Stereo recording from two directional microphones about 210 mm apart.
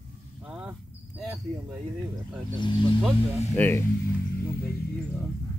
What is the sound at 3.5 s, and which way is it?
Speech, 10° left (ahead or behind).